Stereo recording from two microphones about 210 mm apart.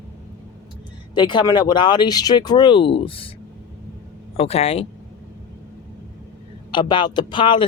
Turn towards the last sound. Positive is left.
turn(degrees=25)  # may be behind; listen again after turning